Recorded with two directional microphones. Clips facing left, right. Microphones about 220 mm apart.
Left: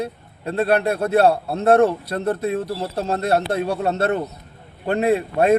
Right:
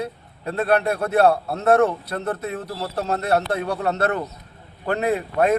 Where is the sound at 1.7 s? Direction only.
30° left (ahead or behind).